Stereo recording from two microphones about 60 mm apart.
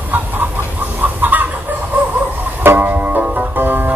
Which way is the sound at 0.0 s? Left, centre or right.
Right.